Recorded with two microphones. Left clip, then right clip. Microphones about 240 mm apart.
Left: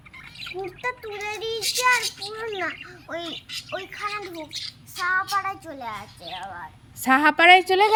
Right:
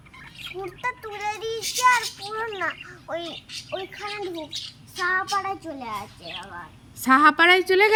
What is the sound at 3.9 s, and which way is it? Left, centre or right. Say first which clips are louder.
A child's voice: left 1 dB; centre.